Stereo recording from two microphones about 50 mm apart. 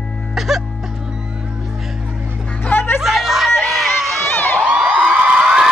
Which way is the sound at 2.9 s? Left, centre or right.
Centre.